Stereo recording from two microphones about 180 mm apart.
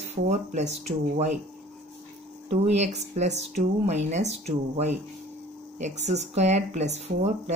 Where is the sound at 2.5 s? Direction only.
35° right (ahead or behind).